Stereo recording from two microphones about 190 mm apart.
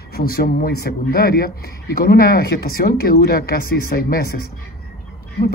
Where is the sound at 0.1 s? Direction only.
55° left (ahead or behind).